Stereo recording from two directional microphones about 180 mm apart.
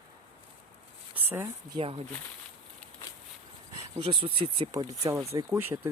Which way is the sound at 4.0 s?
30° right (ahead or behind).